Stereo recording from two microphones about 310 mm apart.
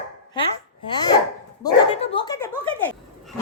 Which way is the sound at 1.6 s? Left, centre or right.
Centre.